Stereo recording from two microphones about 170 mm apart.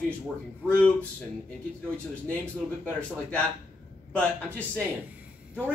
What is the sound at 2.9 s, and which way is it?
Speech, 5° left (ahead or behind).